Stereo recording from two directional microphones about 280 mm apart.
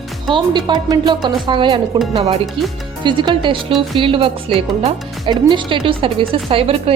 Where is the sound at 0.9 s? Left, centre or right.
Centre.